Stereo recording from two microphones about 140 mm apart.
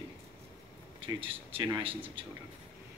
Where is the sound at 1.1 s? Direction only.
40° right (ahead or behind).